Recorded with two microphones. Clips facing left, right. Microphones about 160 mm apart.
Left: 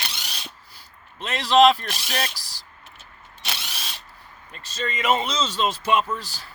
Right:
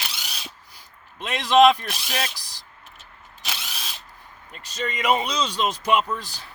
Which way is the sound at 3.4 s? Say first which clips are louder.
Even; centre (ahead or behind).